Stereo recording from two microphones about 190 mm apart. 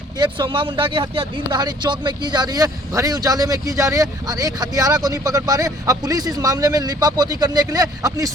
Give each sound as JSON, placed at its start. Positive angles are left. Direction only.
{"t": 0.2, "sound": "speech", "side_deg": -25}